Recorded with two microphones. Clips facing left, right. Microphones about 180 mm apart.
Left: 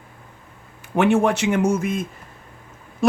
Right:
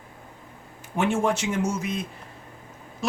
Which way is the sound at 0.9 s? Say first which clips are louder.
Left 6 dB; 65° left (ahead or behind).